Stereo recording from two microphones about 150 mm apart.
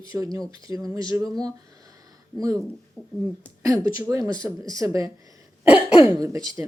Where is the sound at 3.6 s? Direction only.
20° right (ahead or behind).